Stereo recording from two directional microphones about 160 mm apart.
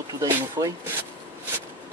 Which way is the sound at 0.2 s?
20° right (ahead or behind).